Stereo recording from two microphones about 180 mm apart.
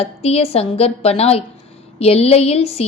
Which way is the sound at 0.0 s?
35° left (ahead or behind).